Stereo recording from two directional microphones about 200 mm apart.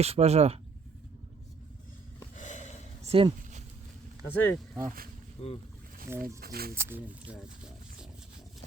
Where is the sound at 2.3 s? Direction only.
40° left (ahead or behind).